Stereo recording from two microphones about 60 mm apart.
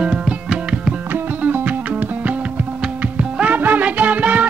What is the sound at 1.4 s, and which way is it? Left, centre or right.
Music, right.